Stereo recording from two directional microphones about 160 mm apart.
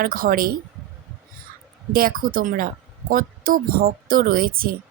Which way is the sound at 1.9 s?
65° right (ahead or behind).